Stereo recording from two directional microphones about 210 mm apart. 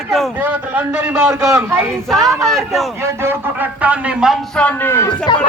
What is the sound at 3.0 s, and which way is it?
Speech, 10° right (ahead or behind).